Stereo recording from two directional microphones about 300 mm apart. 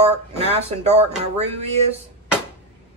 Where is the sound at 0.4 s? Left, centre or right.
Right.